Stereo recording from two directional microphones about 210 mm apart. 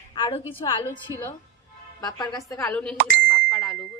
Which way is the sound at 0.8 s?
15° left (ahead or behind).